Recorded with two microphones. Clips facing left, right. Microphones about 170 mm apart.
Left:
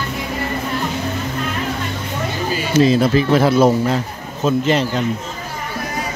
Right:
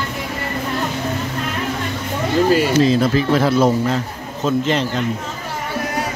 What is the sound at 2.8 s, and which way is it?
Speech, 15° left (ahead or behind).